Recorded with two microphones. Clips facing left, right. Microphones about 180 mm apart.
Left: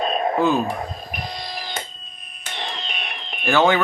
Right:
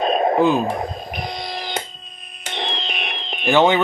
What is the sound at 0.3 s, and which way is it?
Speech, 15° right (ahead or behind).